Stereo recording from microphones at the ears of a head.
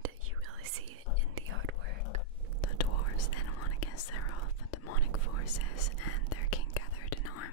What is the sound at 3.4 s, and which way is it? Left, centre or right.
Whispering, left.